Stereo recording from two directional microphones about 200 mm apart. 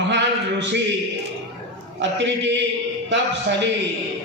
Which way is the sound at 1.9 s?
60° right (ahead or behind).